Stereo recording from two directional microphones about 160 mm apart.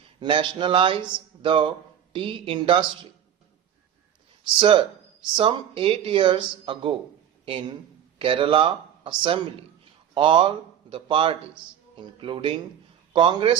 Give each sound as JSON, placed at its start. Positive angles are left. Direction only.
{"t": 0.2, "sound": "speech", "side_deg": -30}
{"t": 4.4, "sound": "speech", "side_deg": -30}